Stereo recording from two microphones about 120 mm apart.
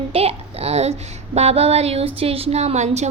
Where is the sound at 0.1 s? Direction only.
55° right (ahead or behind).